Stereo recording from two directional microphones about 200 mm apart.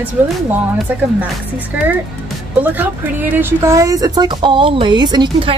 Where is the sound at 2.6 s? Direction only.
10° right (ahead or behind).